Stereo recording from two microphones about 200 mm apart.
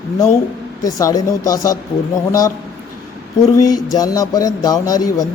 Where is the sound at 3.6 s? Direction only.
20° left (ahead or behind).